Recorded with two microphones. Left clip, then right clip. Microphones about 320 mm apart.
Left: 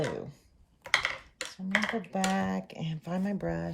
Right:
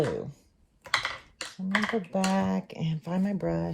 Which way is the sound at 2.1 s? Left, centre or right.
Right.